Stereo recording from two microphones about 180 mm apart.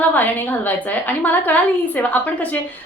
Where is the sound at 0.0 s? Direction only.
10° left (ahead or behind).